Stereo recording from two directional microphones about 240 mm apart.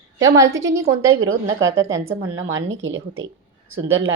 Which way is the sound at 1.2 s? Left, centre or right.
Right.